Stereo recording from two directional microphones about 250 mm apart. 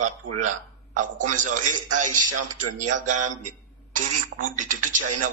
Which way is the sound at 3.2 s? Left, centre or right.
Right.